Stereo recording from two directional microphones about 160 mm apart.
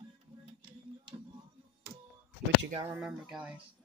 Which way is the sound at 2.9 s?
5° right (ahead or behind).